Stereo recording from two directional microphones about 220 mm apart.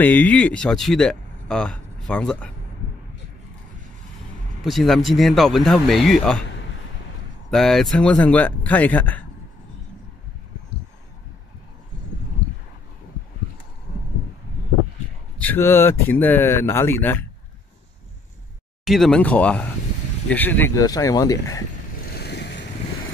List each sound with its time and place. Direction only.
0.0 s speech: 5° left (ahead or behind)
4.6 s speech: centre (ahead or behind)
7.5 s speech: centre (ahead or behind)
15.3 s speech: 10° left (ahead or behind)
18.9 s speech: centre (ahead or behind)
22.1 s vehicle: 50° left (ahead or behind)